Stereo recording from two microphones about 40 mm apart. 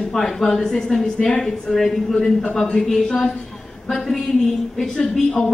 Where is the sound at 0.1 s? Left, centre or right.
Centre.